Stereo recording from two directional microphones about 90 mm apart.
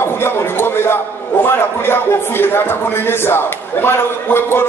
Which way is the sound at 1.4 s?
25° left (ahead or behind).